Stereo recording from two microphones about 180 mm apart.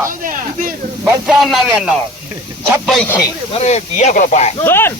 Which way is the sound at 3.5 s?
40° left (ahead or behind).